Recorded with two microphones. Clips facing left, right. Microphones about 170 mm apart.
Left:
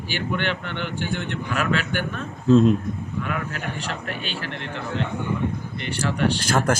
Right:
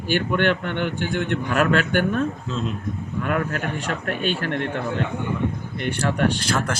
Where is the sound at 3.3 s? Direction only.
50° right (ahead or behind).